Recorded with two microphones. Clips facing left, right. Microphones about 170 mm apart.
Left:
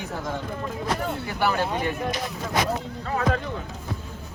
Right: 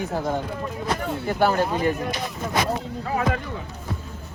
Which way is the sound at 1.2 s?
45° right (ahead or behind).